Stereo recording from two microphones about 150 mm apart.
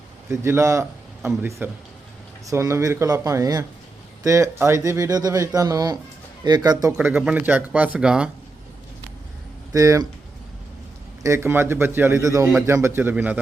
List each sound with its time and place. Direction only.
0.3 s speech: 15° right (ahead or behind)
6.9 s speech: 10° right (ahead or behind)
9.7 s speech: 20° right (ahead or behind)
11.2 s speech: 15° right (ahead or behind)